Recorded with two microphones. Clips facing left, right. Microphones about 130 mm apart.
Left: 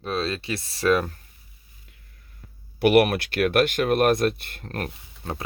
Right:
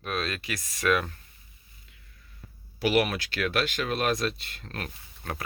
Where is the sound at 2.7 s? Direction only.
60° left (ahead or behind).